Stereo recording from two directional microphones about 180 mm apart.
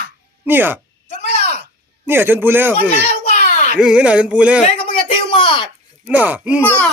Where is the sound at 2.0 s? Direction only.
10° right (ahead or behind).